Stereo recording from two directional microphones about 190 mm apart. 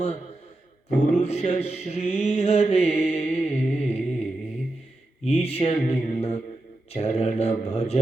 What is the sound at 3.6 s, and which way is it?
Music, 35° left (ahead or behind).